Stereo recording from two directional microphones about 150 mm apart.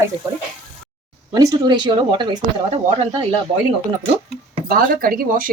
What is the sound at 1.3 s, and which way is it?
Speech, 25° right (ahead or behind).